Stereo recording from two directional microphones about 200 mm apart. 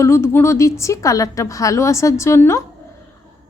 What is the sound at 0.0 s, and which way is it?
A woman's voice, 10° left (ahead or behind).